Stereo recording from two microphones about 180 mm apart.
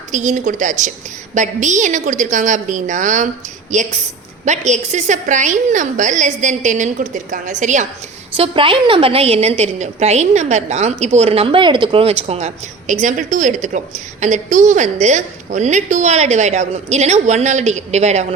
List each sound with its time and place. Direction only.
0.1 s a woman's voice: 45° right (ahead or behind)
8.4 s a woman's voice: 30° right (ahead or behind)